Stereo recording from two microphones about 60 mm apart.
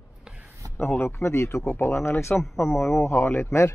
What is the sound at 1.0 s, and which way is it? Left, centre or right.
Speech, left.